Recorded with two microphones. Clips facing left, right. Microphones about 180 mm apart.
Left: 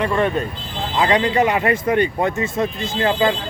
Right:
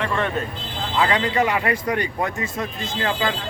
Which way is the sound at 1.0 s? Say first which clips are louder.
Left 4 dB; 20° left (ahead or behind).